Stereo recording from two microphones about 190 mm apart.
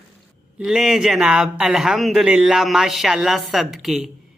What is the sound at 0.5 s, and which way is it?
Speech, centre (ahead or behind).